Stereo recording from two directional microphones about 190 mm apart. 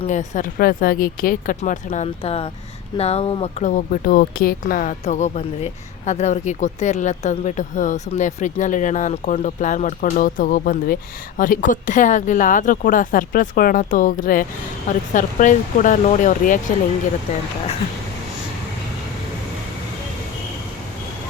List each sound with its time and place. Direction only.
0.0 s speech: 40° left (ahead or behind)